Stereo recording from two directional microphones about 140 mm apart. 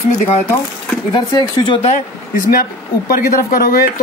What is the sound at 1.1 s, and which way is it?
Speech, 30° left (ahead or behind).